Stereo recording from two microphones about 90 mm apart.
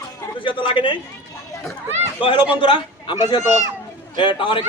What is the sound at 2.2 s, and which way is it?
A man's voice, 65° left (ahead or behind).